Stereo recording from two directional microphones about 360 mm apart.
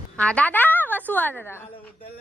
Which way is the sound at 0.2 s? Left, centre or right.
Centre.